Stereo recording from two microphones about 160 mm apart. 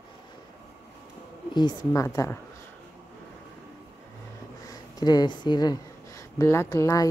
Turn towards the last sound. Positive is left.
turn(degrees=20)  # may be behind; listen again after turning